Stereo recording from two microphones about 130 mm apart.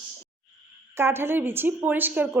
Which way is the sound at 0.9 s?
20° right (ahead or behind).